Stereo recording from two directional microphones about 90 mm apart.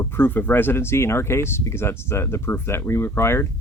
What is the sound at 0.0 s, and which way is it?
Speech, 25° left (ahead or behind).